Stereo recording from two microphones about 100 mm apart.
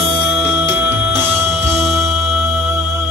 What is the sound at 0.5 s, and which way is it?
Music, 25° right (ahead or behind).